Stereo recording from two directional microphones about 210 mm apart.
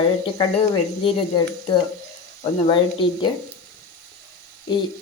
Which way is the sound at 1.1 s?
20° left (ahead or behind).